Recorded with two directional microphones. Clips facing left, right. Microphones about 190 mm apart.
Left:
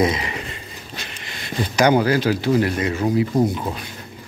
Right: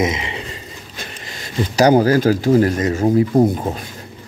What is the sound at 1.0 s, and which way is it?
Speech, 40° right (ahead or behind).